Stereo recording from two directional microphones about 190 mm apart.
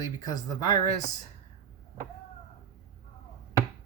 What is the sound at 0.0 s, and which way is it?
Speech, 20° left (ahead or behind).